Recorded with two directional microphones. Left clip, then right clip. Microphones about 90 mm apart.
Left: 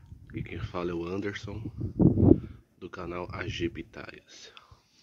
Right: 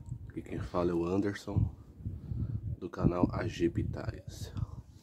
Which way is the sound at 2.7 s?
15° right (ahead or behind).